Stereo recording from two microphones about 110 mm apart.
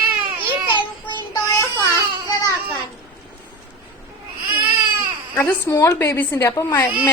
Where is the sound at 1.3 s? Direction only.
35° left (ahead or behind).